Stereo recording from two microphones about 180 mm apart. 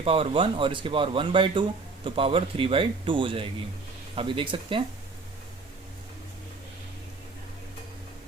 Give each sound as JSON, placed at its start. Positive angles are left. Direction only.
{"t": 0.0, "sound": "speech", "side_deg": -30}